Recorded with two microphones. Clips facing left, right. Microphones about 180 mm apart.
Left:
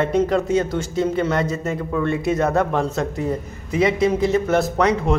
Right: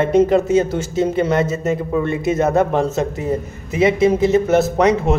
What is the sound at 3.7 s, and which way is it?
Speech, 5° right (ahead or behind).